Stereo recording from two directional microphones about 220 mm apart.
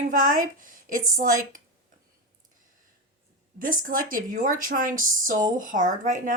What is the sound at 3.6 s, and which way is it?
Speech, 40° right (ahead or behind).